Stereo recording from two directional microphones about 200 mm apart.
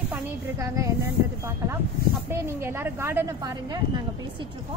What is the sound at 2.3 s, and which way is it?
A woman's voice, 10° right (ahead or behind).